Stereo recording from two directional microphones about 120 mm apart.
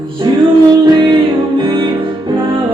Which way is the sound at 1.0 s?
40° right (ahead or behind).